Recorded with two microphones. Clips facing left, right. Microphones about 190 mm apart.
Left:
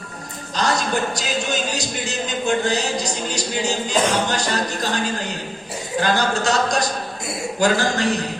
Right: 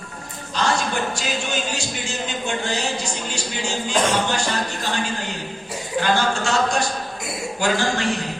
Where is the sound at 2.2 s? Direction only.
40° left (ahead or behind).